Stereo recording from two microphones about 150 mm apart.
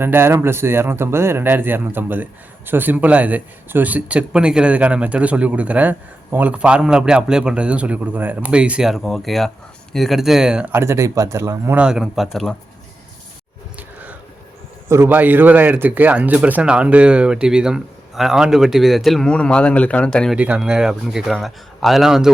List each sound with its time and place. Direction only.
0.0 s speech: 15° right (ahead or behind)
10.7 s speech: 15° right (ahead or behind)
11.8 s speech: 5° right (ahead or behind)
13.7 s a sound: 10° right (ahead or behind)
14.8 s speech: 15° right (ahead or behind); by 20.3 s 5° left (ahead or behind)
20.3 s speech: 10° right (ahead or behind)